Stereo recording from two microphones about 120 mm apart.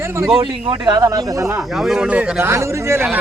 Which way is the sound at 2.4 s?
25° right (ahead or behind).